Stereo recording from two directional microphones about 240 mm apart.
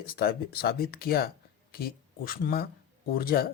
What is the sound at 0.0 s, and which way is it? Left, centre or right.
A man's voice, left.